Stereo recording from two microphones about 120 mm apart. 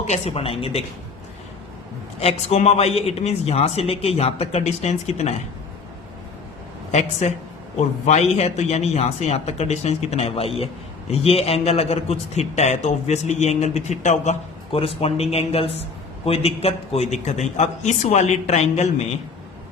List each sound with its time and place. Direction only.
0.1 s a man's voice: 60° left (ahead or behind)
2.1 s a man's voice: 60° left (ahead or behind)
6.9 s a man's voice: 70° left (ahead or behind)
15.0 s a man's voice: 60° left (ahead or behind)